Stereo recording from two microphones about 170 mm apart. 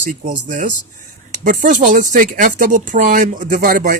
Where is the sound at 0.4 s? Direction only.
50° right (ahead or behind).